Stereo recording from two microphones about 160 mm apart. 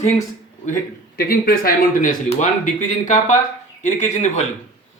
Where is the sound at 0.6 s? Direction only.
60° left (ahead or behind).